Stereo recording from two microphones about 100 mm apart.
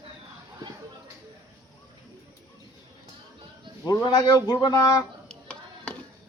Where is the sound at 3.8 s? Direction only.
40° left (ahead or behind).